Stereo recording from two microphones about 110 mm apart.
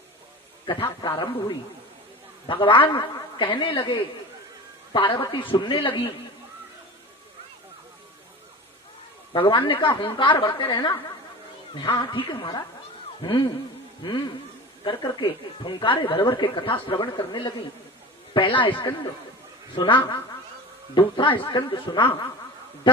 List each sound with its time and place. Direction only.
1.0 s a woman's voice: 40° left (ahead or behind)
2.5 s speech: 50° left (ahead or behind)
4.9 s speech: 55° left (ahead or behind)
9.3 s speech: 50° left (ahead or behind)
14.8 s speech: 40° left (ahead or behind)